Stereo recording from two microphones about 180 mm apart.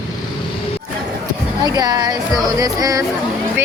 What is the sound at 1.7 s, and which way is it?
Speech, 20° right (ahead or behind).